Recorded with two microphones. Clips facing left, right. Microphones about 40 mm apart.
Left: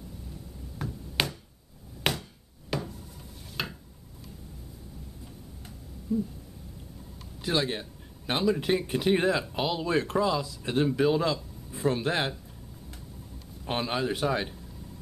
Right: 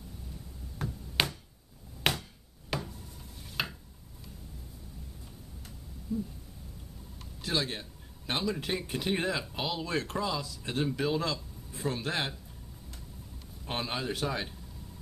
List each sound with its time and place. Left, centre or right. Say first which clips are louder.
0.7 s finger snapping: left 1 dB; centre
2.0 s a sound: left 1 dB; centre
6.1 s a man's voice: left 5 dB; centre
7.4 s a man's voice: left 4 dB; centre
11.9 s speech: left 5 dB; centre
13.7 s a man's voice: left 5 dB; centre